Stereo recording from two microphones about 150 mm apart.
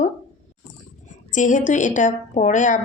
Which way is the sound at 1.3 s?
55° left (ahead or behind).